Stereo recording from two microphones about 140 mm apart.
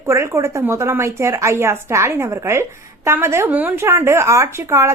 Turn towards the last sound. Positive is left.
turn(degrees=-20)  # may be behind; listen again after turning